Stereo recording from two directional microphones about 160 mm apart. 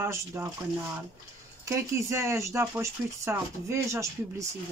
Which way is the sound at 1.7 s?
15° right (ahead or behind).